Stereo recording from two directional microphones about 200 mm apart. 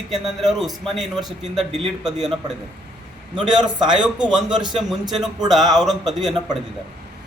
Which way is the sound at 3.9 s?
5° right (ahead or behind).